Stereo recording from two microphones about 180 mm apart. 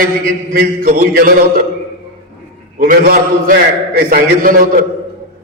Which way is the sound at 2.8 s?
50° right (ahead or behind).